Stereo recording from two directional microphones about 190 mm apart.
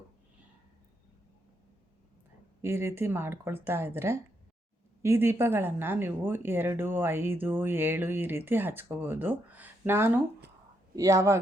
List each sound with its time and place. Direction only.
2.6 s speech: 15° right (ahead or behind)